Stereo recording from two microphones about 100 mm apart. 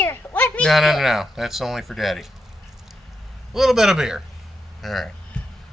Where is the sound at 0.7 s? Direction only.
Centre (ahead or behind).